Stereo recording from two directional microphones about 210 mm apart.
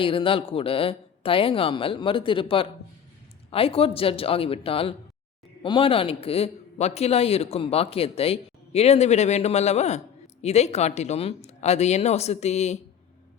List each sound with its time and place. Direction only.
0.0 s a man's voice: 25° left (ahead or behind)